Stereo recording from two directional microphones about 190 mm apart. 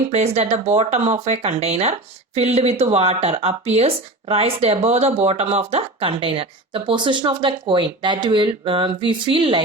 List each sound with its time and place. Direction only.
0.1 s speech: 35° right (ahead or behind)